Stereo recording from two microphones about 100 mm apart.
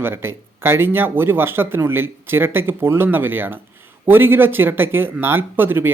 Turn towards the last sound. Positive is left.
turn(degrees=-20)  # may be behind; listen again after turning